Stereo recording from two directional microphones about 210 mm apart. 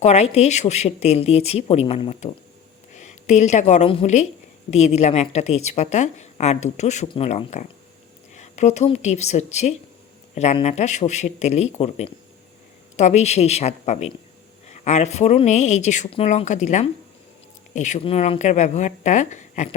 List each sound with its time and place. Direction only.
0.0 s a woman's voice: 30° left (ahead or behind)